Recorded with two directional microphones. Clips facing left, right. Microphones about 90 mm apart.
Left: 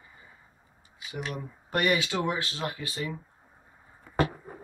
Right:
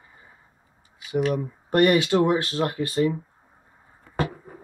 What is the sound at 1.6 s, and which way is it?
Speech, 50° right (ahead or behind).